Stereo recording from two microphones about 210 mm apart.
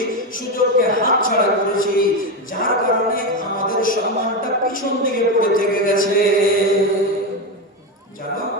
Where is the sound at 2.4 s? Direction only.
40° left (ahead or behind).